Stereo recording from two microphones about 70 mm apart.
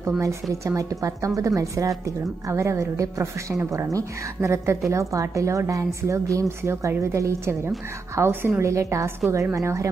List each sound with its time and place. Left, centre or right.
0.0 s a woman's voice: right
8.2 s a woman's voice: right
8.6 s speech: right